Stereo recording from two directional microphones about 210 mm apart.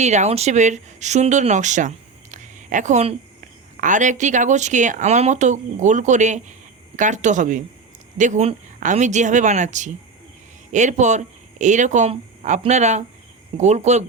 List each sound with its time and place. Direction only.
0.0 s speech: 35° right (ahead or behind)